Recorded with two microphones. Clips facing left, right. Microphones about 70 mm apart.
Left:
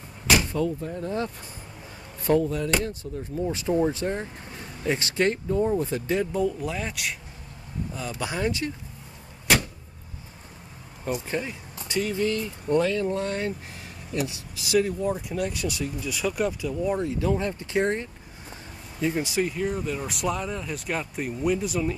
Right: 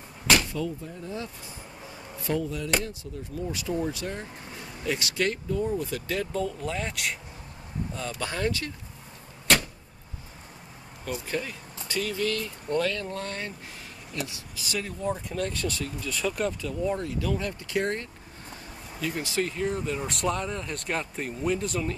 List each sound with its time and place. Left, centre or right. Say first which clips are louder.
0.8 s speech: left 7 dB; left
6.3 s speech: left 3 dB; centre
11.1 s speech: left 3 dB; left
17.0 s speech: left 4 dB; left
19.5 s speech: left 1 dB; centre